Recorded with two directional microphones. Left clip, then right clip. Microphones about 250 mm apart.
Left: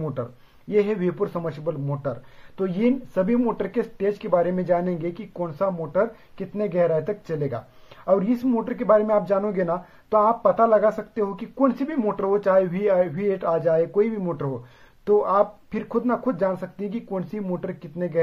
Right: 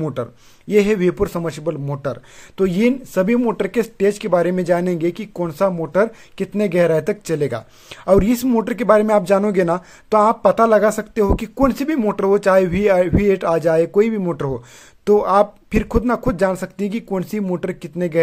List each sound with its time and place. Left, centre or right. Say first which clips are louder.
0.0 s speech: right 6 dB; right